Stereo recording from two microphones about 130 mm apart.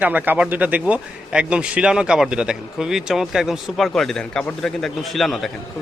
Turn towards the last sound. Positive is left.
turn(degrees=0)  # may be behind; listen again after turning